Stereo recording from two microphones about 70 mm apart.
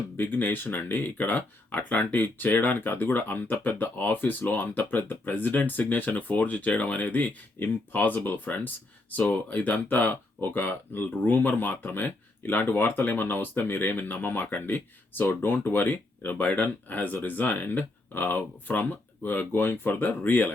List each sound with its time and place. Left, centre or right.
0.2 s speech: left